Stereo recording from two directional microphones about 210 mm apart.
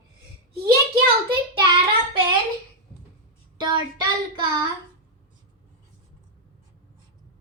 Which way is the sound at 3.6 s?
20° right (ahead or behind).